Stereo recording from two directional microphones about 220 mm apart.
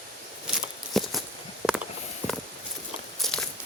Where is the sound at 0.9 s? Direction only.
Centre (ahead or behind).